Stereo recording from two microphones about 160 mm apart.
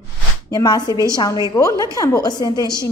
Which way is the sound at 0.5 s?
25° left (ahead or behind).